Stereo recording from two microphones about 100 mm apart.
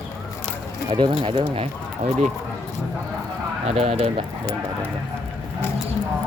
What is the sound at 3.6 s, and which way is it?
Speech, 90° right.